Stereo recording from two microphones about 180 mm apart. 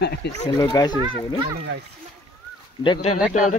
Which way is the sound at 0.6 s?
20° left (ahead or behind).